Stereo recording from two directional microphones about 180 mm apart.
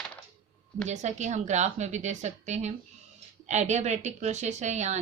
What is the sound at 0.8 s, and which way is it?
A woman's voice, 40° right (ahead or behind).